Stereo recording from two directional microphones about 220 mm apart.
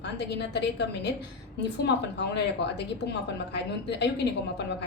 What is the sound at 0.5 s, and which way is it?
Speech, 50° left (ahead or behind).